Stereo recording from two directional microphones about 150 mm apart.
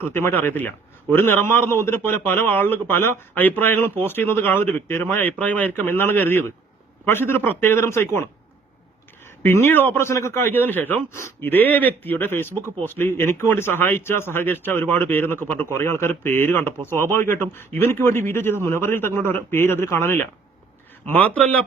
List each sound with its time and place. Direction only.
0.1 s a man's voice: 15° left (ahead or behind)
9.4 s a man's voice: 15° left (ahead or behind)